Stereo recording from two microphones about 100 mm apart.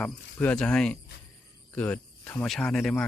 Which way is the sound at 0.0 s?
10° left (ahead or behind).